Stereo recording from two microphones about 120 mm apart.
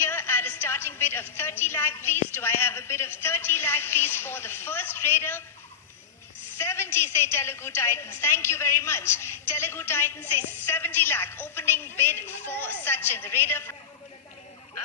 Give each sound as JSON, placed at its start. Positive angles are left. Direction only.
{"t": 0.0, "sound": "a woman's voice", "side_deg": 20}
{"t": 6.6, "sound": "a woman's voice", "side_deg": 20}